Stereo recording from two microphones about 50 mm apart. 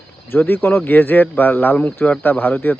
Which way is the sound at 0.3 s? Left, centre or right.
Left.